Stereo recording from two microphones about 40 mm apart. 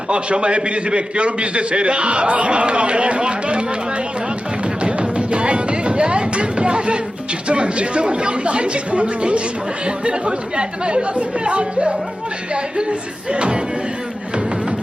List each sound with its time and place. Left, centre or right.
0.1 s a man's voice: right
4.8 s music: right
7.4 s a man's voice: right